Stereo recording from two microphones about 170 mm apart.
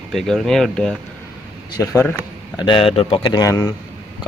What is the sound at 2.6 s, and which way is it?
Speech, 30° left (ahead or behind).